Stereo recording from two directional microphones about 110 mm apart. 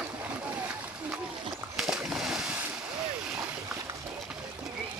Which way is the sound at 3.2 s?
5° right (ahead or behind).